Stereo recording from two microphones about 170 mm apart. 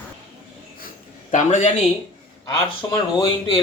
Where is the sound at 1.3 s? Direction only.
45° left (ahead or behind).